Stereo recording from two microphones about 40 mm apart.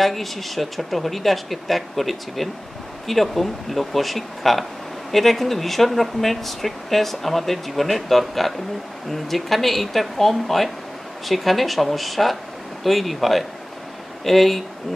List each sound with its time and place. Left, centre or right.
0.0 s speech: centre